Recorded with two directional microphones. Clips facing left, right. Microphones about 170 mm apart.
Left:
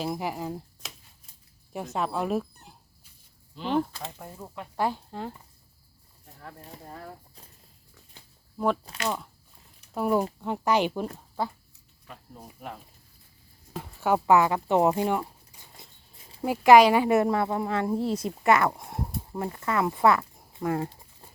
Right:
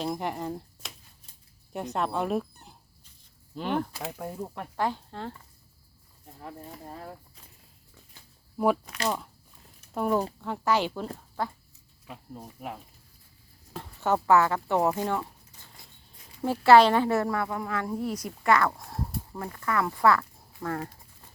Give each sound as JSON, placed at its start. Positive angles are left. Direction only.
{"t": 0.0, "sound": "speech", "side_deg": 5}
{"t": 1.7, "sound": "dog", "side_deg": 0}
{"t": 3.6, "sound": "speech", "side_deg": -45}
{"t": 4.8, "sound": "speech", "side_deg": 10}
{"t": 8.5, "sound": "speech", "side_deg": -10}
{"t": 10.4, "sound": "speech", "side_deg": 20}
{"t": 12.0, "sound": "speech", "side_deg": -10}
{"t": 13.7, "sound": "speech", "side_deg": 10}